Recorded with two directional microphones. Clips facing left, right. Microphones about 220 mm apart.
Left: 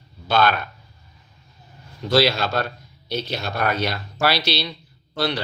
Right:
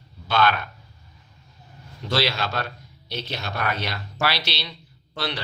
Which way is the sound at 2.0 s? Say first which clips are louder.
Left 6 dB; 40° left (ahead or behind).